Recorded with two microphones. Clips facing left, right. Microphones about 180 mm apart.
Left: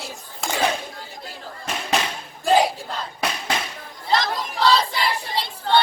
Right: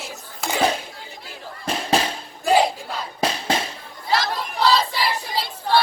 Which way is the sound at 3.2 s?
30° right (ahead or behind).